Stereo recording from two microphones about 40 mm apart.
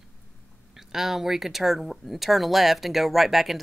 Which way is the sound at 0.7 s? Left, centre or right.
Centre.